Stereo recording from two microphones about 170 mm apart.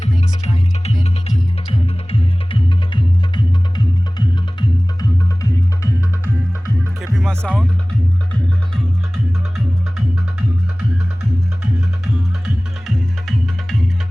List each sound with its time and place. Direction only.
0.0 s music: 40° left (ahead or behind)
2.0 s music: 30° left (ahead or behind)
4.9 s music: 20° left (ahead or behind)
7.0 s music: centre (ahead or behind)
13.2 s music: centre (ahead or behind)